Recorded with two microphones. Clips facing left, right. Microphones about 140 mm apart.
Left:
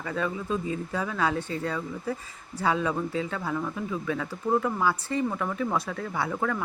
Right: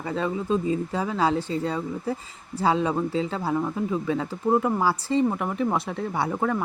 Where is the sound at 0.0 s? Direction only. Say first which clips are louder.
Right 3 dB; 25° right (ahead or behind).